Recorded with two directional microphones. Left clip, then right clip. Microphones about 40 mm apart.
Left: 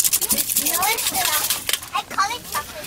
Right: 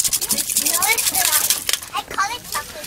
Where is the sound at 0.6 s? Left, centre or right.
Right.